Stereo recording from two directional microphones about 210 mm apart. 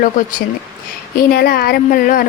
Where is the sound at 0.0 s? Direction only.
40° left (ahead or behind).